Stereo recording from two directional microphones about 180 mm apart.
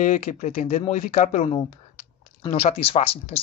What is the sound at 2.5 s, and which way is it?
Speech, 35° left (ahead or behind).